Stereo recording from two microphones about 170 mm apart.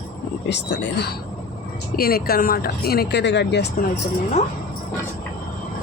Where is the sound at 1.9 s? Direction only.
65° left (ahead or behind); by 3.6 s 90° left.